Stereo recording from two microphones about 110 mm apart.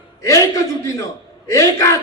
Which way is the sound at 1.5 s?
30° left (ahead or behind).